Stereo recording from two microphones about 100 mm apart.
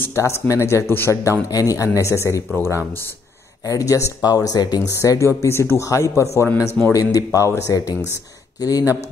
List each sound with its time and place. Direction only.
0.0 s speech: 30° left (ahead or behind)
3.6 s speech: 35° left (ahead or behind)